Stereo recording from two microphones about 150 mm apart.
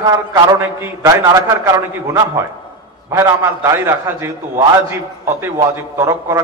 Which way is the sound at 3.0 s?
20° right (ahead or behind).